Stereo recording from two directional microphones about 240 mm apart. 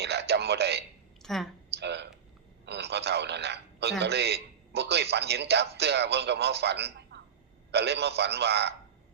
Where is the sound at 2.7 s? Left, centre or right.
Right.